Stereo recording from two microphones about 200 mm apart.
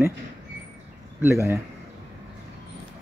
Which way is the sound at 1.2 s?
15° right (ahead or behind).